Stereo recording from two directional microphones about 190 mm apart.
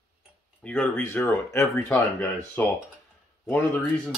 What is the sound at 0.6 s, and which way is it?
Speech, 10° left (ahead or behind).